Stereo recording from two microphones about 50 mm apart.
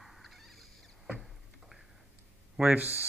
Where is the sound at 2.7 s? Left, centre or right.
Right.